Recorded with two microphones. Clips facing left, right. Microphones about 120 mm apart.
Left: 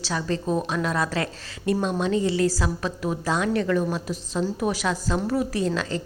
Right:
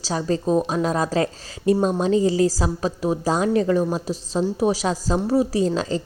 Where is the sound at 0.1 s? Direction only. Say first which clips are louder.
Right 5 dB; 30° right (ahead or behind).